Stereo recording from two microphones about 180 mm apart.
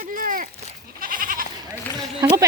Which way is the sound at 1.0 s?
50° right (ahead or behind).